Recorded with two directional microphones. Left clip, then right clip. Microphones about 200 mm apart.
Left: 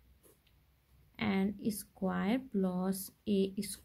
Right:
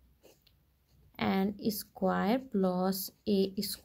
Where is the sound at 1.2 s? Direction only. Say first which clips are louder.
Right 4 dB; 15° right (ahead or behind).